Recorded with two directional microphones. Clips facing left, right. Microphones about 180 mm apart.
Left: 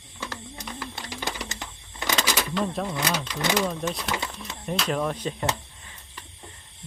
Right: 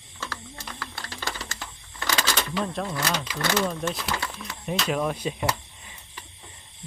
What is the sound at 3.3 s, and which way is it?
Music, 15° left (ahead or behind).